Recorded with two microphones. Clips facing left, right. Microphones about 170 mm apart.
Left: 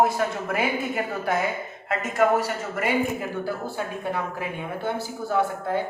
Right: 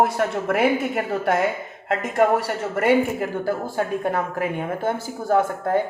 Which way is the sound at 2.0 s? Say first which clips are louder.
Right 3 dB; 55° right (ahead or behind).